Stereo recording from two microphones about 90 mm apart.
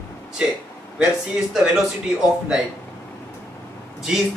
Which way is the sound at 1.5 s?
5° right (ahead or behind).